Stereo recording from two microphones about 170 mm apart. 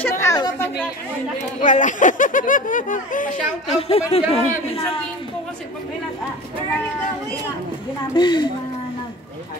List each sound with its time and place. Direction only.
0.0 s a sound: 15° left (ahead or behind)
1.6 s speech: 50° left (ahead or behind)
3.7 s speech: 35° left (ahead or behind)
8.1 s speech: 25° left (ahead or behind)